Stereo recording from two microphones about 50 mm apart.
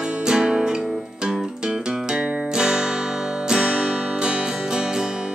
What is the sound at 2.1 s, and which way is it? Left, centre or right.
Music, centre.